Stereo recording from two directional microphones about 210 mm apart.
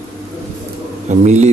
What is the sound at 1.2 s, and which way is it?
Speech, 35° right (ahead or behind).